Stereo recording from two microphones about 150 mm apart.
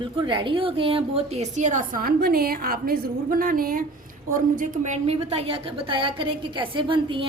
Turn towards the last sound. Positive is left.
turn(degrees=-35)  # may be behind; listen again after turning